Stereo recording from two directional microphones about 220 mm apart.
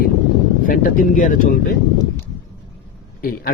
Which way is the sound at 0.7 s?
35° left (ahead or behind).